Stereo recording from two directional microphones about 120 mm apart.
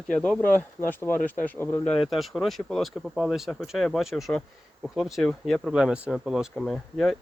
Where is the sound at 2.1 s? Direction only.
Centre (ahead or behind).